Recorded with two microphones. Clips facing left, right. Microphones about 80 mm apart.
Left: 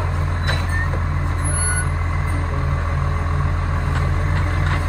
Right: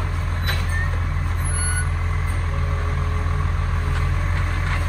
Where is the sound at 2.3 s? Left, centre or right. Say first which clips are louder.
Left 4 dB; left.